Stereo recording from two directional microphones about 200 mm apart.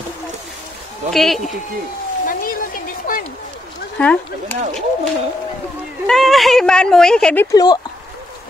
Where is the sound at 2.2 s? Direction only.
45° left (ahead or behind).